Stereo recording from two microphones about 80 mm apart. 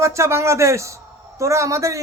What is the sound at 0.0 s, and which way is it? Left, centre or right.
Speech, right.